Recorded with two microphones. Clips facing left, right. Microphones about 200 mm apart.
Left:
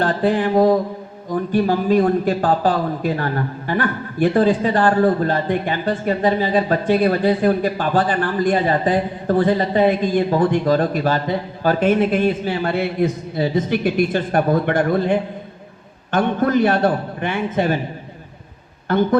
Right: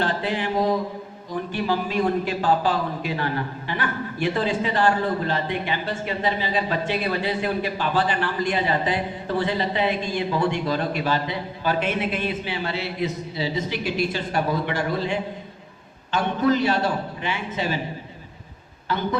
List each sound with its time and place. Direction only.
0.0 s mantra: 45° left (ahead or behind)
1.3 s a man's voice: 45° left (ahead or behind)
18.9 s a man's voice: 50° left (ahead or behind)